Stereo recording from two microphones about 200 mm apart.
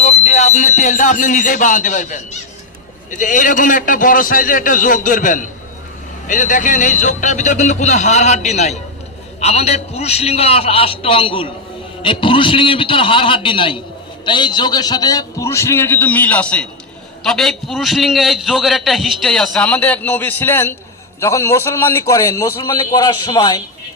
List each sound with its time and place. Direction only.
0.0 s a man's voice: 35° left (ahead or behind)